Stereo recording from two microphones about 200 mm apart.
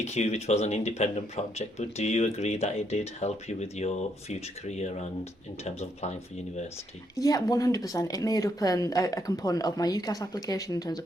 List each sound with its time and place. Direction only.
0.0 s speech: 35° left (ahead or behind)
7.2 s speech: 15° left (ahead or behind)